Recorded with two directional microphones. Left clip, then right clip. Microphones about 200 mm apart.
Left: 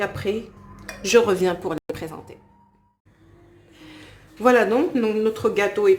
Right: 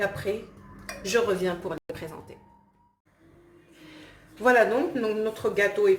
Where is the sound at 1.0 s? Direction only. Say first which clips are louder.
Left 7 dB; 45° left (ahead or behind).